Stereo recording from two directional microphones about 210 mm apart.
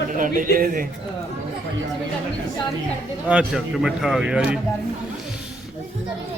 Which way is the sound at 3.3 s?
Centre (ahead or behind).